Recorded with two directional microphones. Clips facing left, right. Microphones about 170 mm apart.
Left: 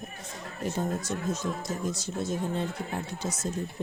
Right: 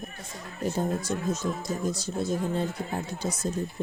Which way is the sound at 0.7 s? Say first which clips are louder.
Right 3 dB; 30° right (ahead or behind).